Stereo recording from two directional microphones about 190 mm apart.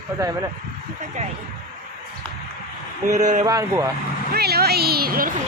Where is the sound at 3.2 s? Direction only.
40° right (ahead or behind).